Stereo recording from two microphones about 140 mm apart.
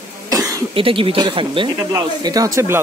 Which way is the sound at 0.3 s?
25° right (ahead or behind).